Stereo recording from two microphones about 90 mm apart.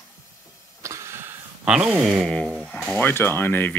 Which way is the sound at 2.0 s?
5° left (ahead or behind).